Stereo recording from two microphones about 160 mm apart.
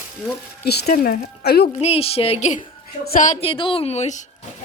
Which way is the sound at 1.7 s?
40° left (ahead or behind).